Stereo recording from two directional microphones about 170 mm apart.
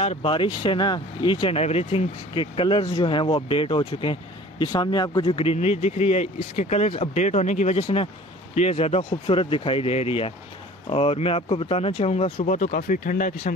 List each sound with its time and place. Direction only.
0.0 s speech: 35° left (ahead or behind); by 13.5 s 50° left (ahead or behind)